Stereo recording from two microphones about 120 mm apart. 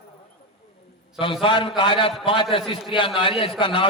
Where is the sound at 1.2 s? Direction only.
45° left (ahead or behind).